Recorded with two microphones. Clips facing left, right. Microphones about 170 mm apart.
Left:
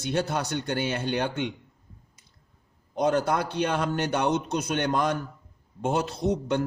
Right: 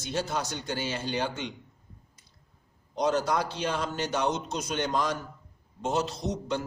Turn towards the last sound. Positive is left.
turn(degrees=55)  # may be behind; listen again after turning